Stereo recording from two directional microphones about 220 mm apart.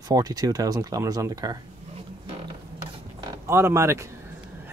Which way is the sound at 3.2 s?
10° right (ahead or behind).